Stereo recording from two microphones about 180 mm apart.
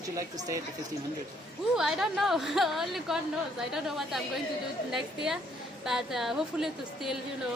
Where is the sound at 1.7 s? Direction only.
5° right (ahead or behind).